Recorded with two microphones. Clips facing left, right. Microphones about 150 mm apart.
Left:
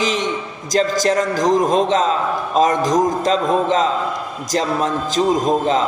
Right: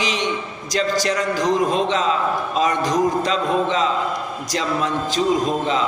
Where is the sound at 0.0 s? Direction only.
45° left (ahead or behind).